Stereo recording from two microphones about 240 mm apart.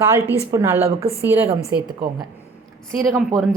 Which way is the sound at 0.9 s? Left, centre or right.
Right.